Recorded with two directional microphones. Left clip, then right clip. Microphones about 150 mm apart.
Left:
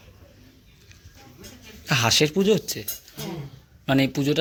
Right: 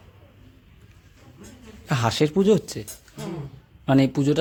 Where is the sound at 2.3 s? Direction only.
30° right (ahead or behind).